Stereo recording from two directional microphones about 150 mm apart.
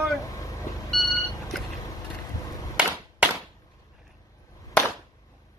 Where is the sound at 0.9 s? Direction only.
Centre (ahead or behind).